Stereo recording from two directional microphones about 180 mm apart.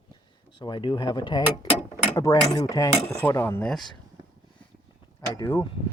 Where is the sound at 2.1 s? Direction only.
20° left (ahead or behind); by 3.9 s centre (ahead or behind).